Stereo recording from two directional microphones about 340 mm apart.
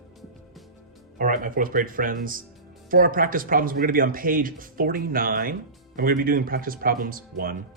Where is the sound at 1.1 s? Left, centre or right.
Right.